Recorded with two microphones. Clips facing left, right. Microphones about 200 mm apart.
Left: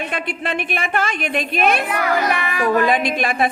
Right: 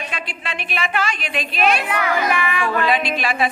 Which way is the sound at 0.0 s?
55° left (ahead or behind).